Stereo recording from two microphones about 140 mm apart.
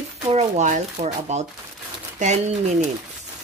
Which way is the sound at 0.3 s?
55° right (ahead or behind).